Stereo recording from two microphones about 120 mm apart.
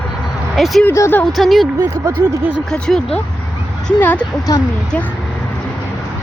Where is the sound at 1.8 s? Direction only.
30° right (ahead or behind).